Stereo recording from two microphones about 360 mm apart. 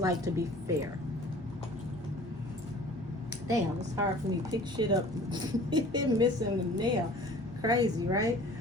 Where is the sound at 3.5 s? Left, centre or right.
Centre.